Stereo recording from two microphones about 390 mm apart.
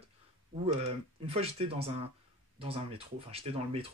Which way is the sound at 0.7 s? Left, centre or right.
Centre.